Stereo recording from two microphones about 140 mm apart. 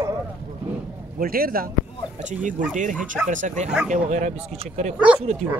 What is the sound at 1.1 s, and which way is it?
Speech, 90° right.